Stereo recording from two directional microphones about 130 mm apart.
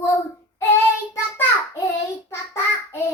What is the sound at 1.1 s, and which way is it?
Child singing, 20° left (ahead or behind).